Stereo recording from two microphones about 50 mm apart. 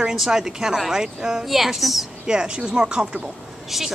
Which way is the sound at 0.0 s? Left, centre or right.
Centre.